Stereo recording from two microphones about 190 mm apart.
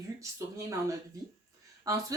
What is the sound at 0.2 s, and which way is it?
A woman's voice, 15° right (ahead or behind).